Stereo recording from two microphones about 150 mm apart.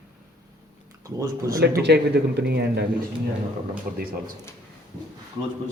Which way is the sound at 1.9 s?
90° right.